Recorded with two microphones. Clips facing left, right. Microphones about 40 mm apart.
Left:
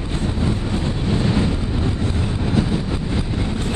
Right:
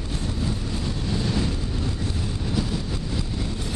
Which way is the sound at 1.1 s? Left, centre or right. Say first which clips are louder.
Left 6 dB; left.